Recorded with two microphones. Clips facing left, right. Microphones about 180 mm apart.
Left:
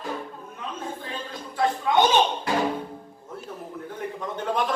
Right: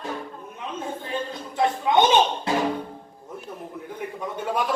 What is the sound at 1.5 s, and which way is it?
Speech, 20° right (ahead or behind).